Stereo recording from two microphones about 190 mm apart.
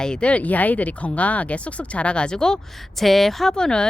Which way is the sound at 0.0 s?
5° left (ahead or behind).